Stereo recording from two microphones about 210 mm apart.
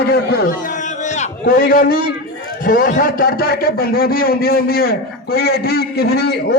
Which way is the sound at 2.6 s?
40° left (ahead or behind).